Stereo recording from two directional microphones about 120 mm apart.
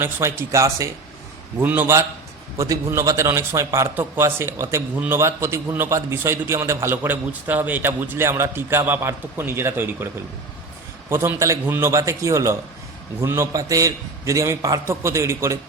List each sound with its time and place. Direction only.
0.0 s a man's voice: 20° right (ahead or behind)
1.5 s a man's voice: 15° right (ahead or behind)
11.1 s a man's voice: 20° right (ahead or behind)